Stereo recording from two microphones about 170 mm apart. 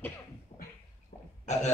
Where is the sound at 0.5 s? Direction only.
35° left (ahead or behind).